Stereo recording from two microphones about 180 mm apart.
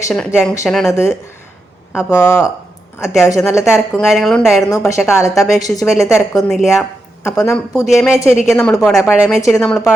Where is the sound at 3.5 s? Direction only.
15° left (ahead or behind).